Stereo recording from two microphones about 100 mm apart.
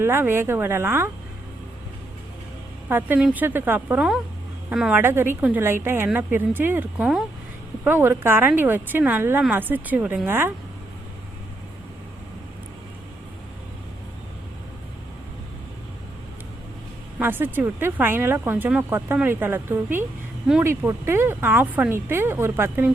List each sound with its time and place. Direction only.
0.0 s speech: 25° right (ahead or behind)
3.2 s speech: 10° right (ahead or behind)
3.4 s speech: 20° right (ahead or behind)
4.7 s speech: 10° right (ahead or behind)
4.9 s speech: 20° right (ahead or behind)
7.0 s speech: 5° right (ahead or behind)
7.9 s speech: 20° right (ahead or behind)
17.2 s speech: 20° right (ahead or behind)